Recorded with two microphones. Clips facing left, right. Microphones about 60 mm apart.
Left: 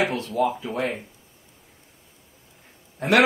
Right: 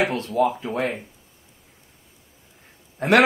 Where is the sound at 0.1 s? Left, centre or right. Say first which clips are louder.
Right 2 dB; right.